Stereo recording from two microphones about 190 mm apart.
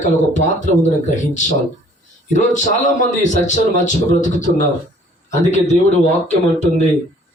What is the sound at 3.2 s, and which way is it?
Speech, 40° left (ahead or behind).